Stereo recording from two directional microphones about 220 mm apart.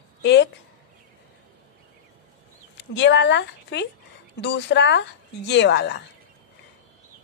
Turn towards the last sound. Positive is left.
turn(degrees=50)  # may be behind; listen again after turning